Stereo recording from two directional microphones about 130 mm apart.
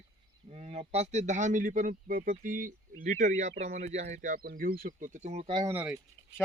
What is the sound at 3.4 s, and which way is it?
Speech, 65° right (ahead or behind).